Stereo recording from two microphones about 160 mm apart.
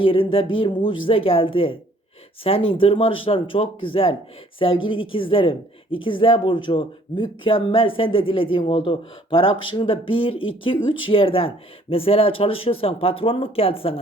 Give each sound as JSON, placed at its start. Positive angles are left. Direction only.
{"t": 0.0, "sound": "speech", "side_deg": 35}